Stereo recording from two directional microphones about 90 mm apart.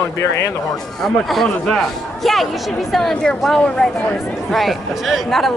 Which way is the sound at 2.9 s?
5° left (ahead or behind).